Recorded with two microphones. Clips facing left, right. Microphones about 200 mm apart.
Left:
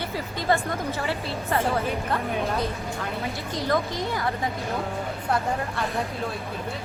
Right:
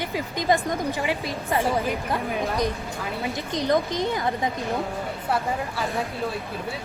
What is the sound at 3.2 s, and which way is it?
A woman's voice, 20° right (ahead or behind).